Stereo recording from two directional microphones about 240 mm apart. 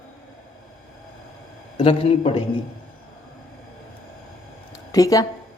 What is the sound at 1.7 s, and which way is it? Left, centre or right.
Speech, left.